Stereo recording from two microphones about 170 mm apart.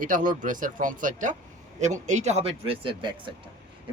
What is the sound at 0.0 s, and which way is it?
Speech, 50° right (ahead or behind).